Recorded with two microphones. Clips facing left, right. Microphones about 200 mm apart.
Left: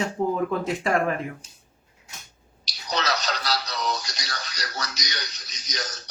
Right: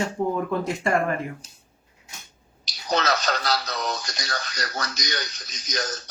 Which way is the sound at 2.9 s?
50° right (ahead or behind).